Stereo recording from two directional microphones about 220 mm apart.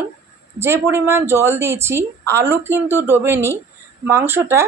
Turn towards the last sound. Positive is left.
turn(degrees=-10)  # may be behind; listen again after turning